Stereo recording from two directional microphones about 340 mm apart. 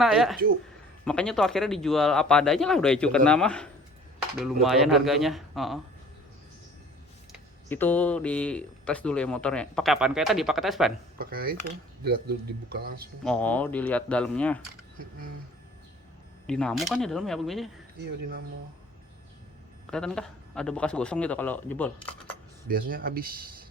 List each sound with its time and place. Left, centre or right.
0.0 s speech: centre
7.7 s speech: centre
11.2 s a man's voice: right
13.2 s speech: centre
16.5 s speech: centre
19.9 s speech: centre
22.7 s a man's voice: right